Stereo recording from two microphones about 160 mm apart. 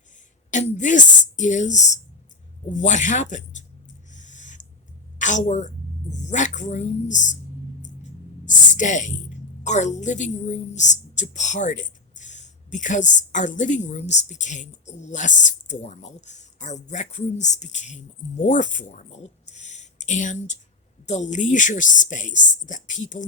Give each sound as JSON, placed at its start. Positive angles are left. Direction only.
{"t": 0.5, "sound": "a woman's voice", "side_deg": 45}
{"t": 4.1, "sound": "owl", "side_deg": 50}
{"t": 5.2, "sound": "a woman's voice", "side_deg": 50}
{"t": 8.4, "sound": "a woman's voice", "side_deg": 50}